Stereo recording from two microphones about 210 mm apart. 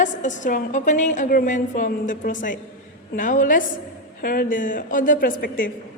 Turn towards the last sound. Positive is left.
turn(degrees=40)  # may be behind; listen again after turning